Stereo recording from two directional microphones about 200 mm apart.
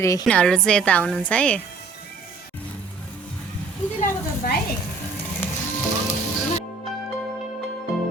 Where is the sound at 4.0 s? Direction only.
45° left (ahead or behind).